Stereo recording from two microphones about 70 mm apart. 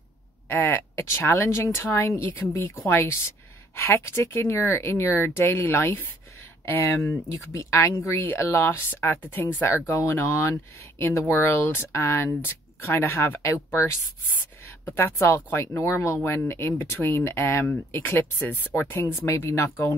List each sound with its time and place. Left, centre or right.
0.5 s speech: left
14.9 s speech: left
18.8 s speech: left